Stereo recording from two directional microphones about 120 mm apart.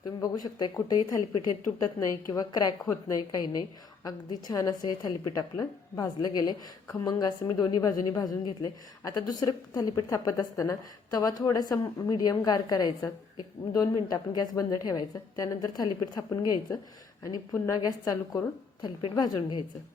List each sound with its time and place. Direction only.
0.2 s a woman's voice: 35° left (ahead or behind)
2.8 s a woman's voice: 20° left (ahead or behind)
3.2 s a woman's voice: 35° left (ahead or behind)